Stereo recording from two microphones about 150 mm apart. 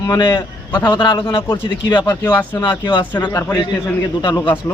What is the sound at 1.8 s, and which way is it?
Speech, 25° left (ahead or behind).